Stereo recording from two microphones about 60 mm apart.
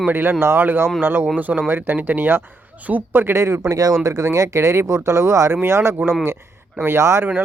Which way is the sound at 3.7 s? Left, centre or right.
Right.